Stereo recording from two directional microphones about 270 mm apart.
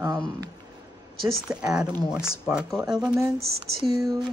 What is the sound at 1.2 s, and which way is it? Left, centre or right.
Speech, centre.